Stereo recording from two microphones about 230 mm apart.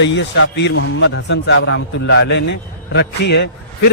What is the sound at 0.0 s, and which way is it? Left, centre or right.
A man's voice, left.